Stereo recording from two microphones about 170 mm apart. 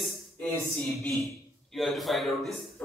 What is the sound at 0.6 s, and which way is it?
A man's voice, centre (ahead or behind).